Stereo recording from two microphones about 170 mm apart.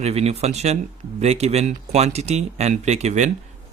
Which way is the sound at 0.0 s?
40° right (ahead or behind).